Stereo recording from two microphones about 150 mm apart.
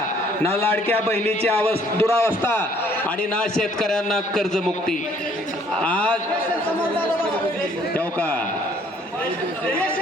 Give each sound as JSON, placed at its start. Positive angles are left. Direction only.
{"t": 0.6, "sound": "a man's voice", "side_deg": 15}
{"t": 3.3, "sound": "a man's voice", "side_deg": 5}
{"t": 7.9, "sound": "a man's voice", "side_deg": 10}